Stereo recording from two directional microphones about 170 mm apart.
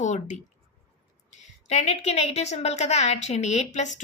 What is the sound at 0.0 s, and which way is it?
A woman's voice, 45° left (ahead or behind).